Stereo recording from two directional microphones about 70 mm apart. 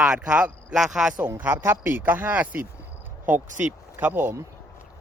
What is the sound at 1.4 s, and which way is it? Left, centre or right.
Speech, right.